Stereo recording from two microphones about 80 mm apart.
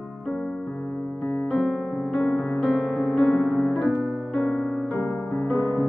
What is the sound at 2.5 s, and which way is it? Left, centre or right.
Music, centre.